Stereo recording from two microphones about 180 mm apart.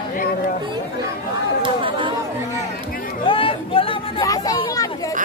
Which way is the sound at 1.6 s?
30° right (ahead or behind).